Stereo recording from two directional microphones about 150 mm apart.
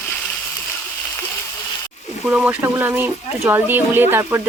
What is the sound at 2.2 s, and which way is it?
Speech, 5° right (ahead or behind).